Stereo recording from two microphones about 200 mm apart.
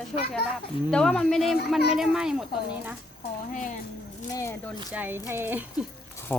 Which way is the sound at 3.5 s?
40° left (ahead or behind).